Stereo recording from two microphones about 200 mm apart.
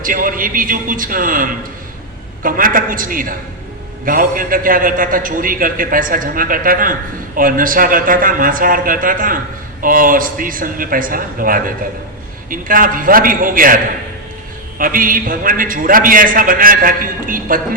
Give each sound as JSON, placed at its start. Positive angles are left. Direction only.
{"t": 0.0, "sound": "a man's voice", "side_deg": -45}